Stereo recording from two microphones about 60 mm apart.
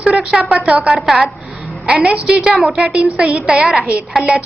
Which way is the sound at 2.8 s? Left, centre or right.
Centre.